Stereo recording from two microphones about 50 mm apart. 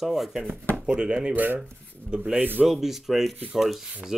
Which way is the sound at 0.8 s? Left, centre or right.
Centre.